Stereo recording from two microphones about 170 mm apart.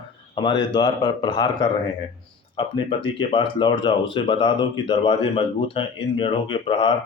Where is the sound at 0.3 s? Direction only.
25° left (ahead or behind).